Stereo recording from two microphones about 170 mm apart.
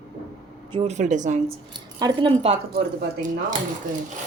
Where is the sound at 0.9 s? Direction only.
45° right (ahead or behind).